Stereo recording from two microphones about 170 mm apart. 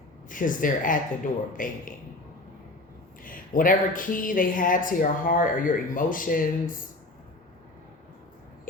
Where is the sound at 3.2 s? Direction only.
55° left (ahead or behind).